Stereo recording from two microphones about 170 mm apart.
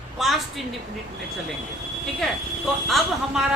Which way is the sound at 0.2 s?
Centre (ahead or behind).